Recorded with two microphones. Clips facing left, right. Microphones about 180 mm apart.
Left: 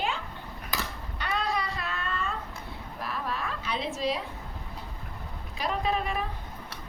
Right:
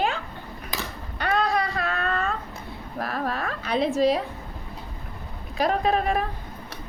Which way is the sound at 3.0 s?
45° right (ahead or behind).